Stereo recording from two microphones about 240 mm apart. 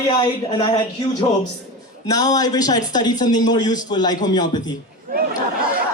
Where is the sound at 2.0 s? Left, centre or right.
Centre.